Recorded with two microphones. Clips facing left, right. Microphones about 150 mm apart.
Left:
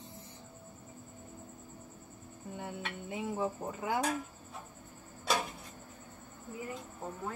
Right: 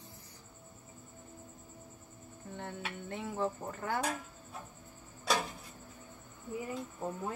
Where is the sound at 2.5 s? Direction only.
10° left (ahead or behind).